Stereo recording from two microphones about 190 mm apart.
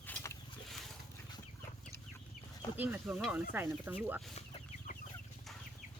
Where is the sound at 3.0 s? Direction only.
5° right (ahead or behind).